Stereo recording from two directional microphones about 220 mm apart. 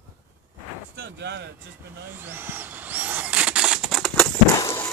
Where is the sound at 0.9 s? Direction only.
50° right (ahead or behind).